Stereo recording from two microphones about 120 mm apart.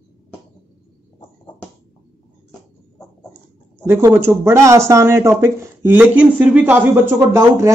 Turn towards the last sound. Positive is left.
turn(degrees=-20)  # may be behind; listen again after turning